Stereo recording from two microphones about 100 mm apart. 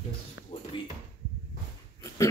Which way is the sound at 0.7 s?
55° left (ahead or behind).